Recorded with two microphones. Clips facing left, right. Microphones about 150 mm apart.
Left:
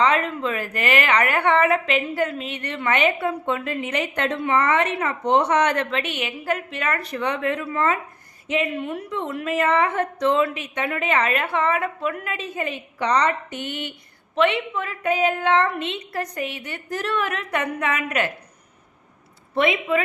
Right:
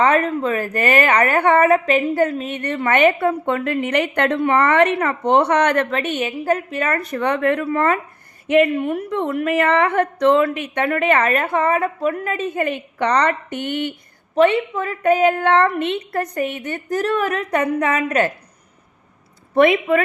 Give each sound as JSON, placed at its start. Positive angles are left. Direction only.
{"t": 0.0, "sound": "a woman's voice", "side_deg": -45}
{"t": 14.3, "sound": "a woman's voice", "side_deg": -40}
{"t": 19.5, "sound": "a woman's voice", "side_deg": -55}